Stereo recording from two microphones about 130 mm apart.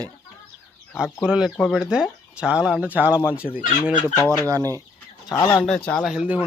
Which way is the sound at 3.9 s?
90° left.